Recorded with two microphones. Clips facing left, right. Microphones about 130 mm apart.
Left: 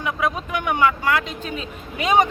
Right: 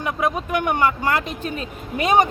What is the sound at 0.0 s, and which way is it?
Speech, 45° right (ahead or behind).